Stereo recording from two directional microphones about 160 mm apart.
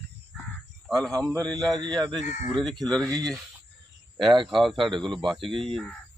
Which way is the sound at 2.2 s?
45° left (ahead or behind).